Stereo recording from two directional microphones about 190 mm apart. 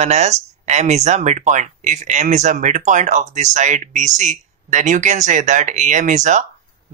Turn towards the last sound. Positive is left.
turn(degrees=-40)  # may be behind; listen again after turning